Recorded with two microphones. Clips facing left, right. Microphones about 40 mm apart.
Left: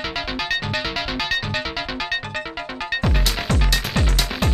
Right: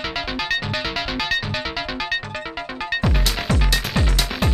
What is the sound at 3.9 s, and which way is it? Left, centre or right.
Music, centre.